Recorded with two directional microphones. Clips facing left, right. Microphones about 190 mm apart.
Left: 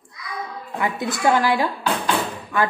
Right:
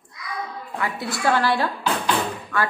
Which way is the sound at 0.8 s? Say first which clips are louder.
Left 4 dB; 20° left (ahead or behind).